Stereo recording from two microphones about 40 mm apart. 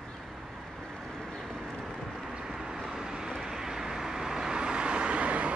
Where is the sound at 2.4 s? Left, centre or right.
Centre.